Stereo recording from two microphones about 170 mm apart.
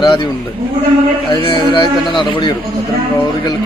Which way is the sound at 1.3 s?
30° left (ahead or behind).